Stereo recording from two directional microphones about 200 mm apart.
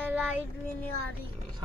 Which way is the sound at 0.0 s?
10° right (ahead or behind).